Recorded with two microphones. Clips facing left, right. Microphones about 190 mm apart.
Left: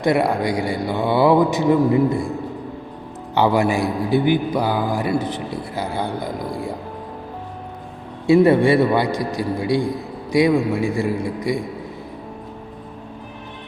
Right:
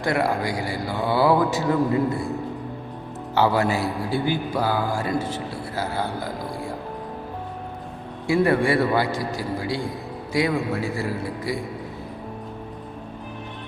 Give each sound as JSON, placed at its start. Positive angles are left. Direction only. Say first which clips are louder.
{"t": 0.0, "sound": "speech", "louder": "left 5 dB", "side_deg": 20}
{"t": 3.3, "sound": "a man's voice", "louder": "left 3 dB", "side_deg": 15}
{"t": 8.3, "sound": "a man's voice", "louder": "left 6 dB", "side_deg": 25}